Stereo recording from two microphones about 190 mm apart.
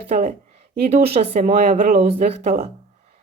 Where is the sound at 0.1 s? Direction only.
45° right (ahead or behind).